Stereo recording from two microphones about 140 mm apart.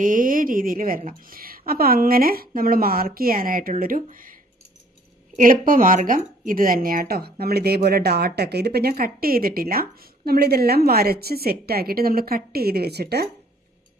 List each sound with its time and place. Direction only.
0.0 s a woman's voice: 75° right (ahead or behind)
5.4 s a woman's voice: 80° right